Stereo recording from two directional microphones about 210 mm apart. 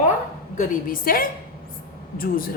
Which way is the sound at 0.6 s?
40° left (ahead or behind).